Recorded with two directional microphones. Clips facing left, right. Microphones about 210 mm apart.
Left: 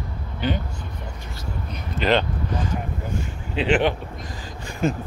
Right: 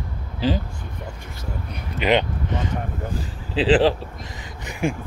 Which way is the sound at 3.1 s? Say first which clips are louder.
Right 1 dB; 30° right (ahead or behind).